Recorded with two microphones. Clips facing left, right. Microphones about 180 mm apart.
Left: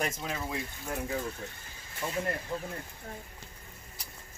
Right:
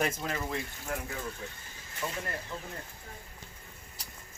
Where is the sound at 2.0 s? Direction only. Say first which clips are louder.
Left 2 dB; 15° left (ahead or behind).